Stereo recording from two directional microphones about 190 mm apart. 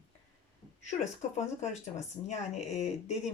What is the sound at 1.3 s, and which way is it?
Speech, 40° left (ahead or behind).